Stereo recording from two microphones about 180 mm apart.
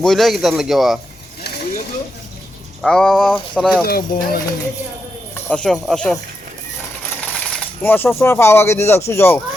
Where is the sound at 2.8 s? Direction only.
5° left (ahead or behind).